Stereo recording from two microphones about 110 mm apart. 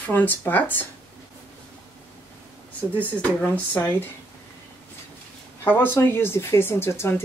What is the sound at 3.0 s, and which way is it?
Speech, 10° left (ahead or behind).